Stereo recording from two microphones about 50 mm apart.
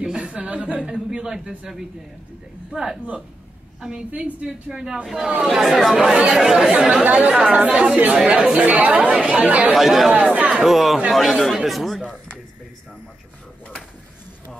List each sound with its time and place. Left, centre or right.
0.0 s a woman's voice: centre
2.7 s a woman's voice: centre
4.1 s a woman's voice: right
7.1 s a woman's voice: right
8.2 s a woman's voice: centre
9.1 s a woman's voice: centre
9.4 s a woman's voice: right
9.8 s speech: centre
10.1 s a woman's voice: right
10.6 s speech: centre
12.0 s a sound: right